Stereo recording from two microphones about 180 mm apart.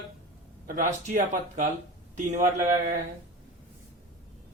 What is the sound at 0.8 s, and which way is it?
Speech, 45° right (ahead or behind).